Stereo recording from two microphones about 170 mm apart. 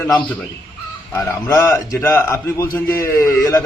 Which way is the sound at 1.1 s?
15° left (ahead or behind).